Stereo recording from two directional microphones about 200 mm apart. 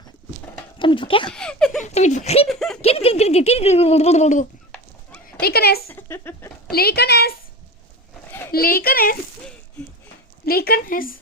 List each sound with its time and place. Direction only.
0.8 s speech: 25° left (ahead or behind)
1.3 s speech: 5° left (ahead or behind)
1.8 s speech: 35° left (ahead or behind)
2.5 s speech: centre (ahead or behind)
2.8 s speech: 30° left (ahead or behind)
5.4 s speech: 50° left (ahead or behind)
5.9 s speech: 10° left (ahead or behind)
6.7 s speech: 50° left (ahead or behind)
8.5 s speech: 50° left (ahead or behind)
10.4 s speech: 50° left (ahead or behind)